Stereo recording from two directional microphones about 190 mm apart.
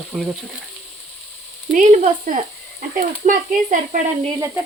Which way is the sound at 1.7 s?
40° right (ahead or behind).